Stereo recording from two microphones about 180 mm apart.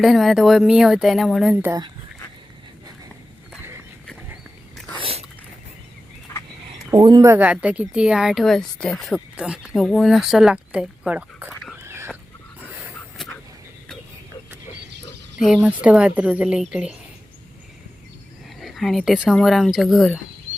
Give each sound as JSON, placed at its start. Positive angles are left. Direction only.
{"t": 0.0, "sound": "speech", "side_deg": 0}
{"t": 1.6, "sound": "speech", "side_deg": -20}
{"t": 4.9, "sound": "biting", "side_deg": -30}
{"t": 6.9, "sound": "speech", "side_deg": -20}
{"t": 15.4, "sound": "speech", "side_deg": 0}
{"t": 18.6, "sound": "speech", "side_deg": 0}